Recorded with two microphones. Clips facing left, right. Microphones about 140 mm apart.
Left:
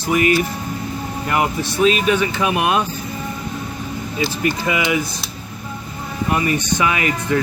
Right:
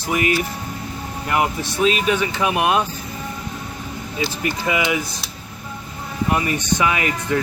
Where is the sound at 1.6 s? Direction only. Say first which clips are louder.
Left 3 dB; 20° right (ahead or behind).